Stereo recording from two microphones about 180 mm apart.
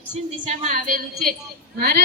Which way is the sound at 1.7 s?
60° right (ahead or behind).